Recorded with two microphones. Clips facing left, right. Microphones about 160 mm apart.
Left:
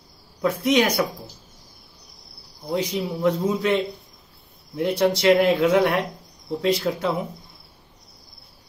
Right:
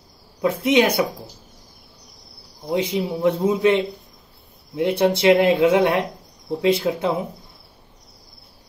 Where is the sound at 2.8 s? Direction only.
30° right (ahead or behind).